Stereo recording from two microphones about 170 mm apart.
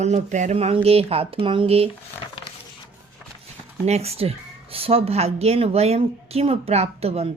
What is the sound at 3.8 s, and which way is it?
Speech, 40° right (ahead or behind).